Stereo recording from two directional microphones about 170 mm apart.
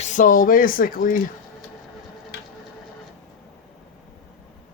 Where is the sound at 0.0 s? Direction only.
50° left (ahead or behind).